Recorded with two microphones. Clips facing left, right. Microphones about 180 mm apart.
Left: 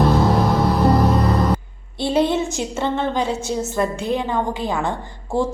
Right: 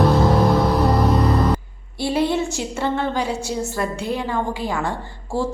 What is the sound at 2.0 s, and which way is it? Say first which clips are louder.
A woman's voice: left 2 dB; 20° left (ahead or behind).